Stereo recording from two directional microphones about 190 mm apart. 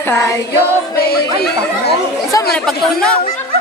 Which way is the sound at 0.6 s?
55° left (ahead or behind).